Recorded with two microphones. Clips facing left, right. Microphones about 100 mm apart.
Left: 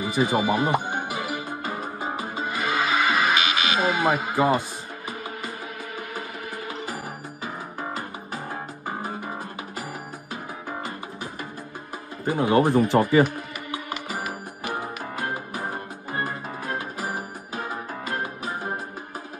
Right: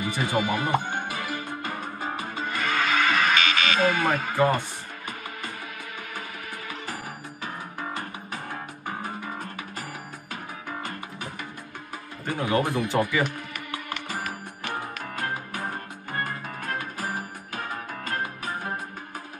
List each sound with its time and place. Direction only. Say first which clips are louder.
0.2 s speech: left 5 dB; 25° left (ahead or behind)
0.7 s speech: left 1 dB; 10° left (ahead or behind)
1.0 s music: left 2 dB; 15° left (ahead or behind)
7.8 s music: left 1 dB; 30° left (ahead or behind)
12.3 s speech: left 5 dB; 30° left (ahead or behind)
13.7 s music: left 2 dB; 10° left (ahead or behind)